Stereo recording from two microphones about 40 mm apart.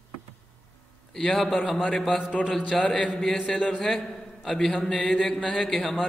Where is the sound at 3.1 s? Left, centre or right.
Centre.